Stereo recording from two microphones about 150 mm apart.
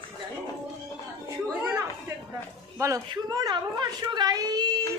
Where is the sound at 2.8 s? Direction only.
20° right (ahead or behind).